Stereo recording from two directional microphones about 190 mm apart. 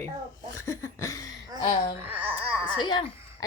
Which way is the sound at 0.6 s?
15° left (ahead or behind).